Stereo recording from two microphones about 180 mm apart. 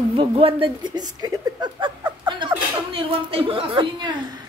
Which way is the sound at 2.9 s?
30° right (ahead or behind).